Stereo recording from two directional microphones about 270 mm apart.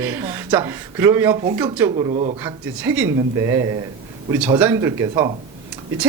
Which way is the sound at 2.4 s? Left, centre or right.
Centre.